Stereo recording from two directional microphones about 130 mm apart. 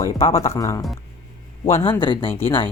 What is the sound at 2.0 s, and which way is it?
Speech, 40° left (ahead or behind).